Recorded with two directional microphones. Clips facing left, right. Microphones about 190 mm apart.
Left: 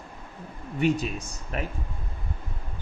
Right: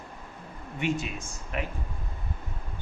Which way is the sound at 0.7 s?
40° left (ahead or behind).